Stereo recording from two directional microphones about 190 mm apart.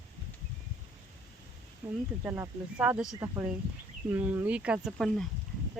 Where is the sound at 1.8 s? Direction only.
5° right (ahead or behind).